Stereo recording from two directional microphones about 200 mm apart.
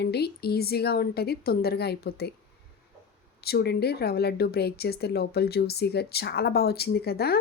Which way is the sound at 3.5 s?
55° left (ahead or behind).